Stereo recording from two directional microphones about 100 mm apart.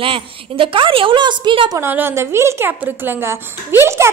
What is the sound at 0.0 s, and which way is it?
A woman's voice, 60° right (ahead or behind).